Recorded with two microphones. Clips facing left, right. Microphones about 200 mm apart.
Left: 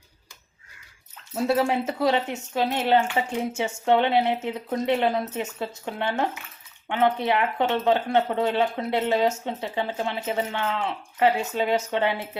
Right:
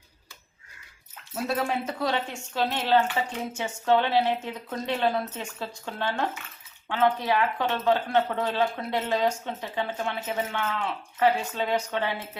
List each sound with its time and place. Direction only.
1.5 s speech: 25° left (ahead or behind)